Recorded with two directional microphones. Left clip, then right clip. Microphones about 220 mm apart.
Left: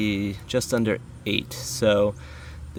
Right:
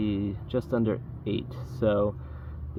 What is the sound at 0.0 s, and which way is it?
Speech, 25° left (ahead or behind).